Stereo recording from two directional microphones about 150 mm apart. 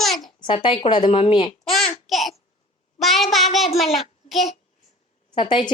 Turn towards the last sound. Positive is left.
turn(degrees=35)  # may be behind; listen again after turning